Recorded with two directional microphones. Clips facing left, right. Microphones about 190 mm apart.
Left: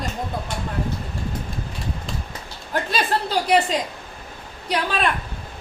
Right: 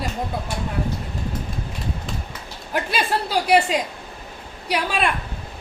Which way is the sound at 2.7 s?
10° right (ahead or behind).